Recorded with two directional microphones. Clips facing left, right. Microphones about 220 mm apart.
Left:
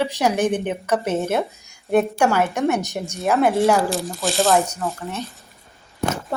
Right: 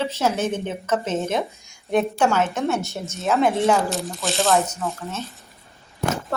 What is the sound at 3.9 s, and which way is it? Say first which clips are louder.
Speech: left 2 dB; centre (ahead or behind).